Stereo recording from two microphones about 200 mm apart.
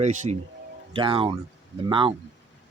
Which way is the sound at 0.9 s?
25° right (ahead or behind).